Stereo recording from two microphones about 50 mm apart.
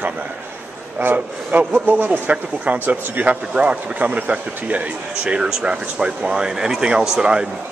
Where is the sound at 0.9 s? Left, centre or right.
Right.